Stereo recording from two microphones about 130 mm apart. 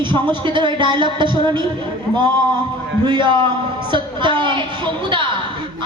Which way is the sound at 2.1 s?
35° right (ahead or behind).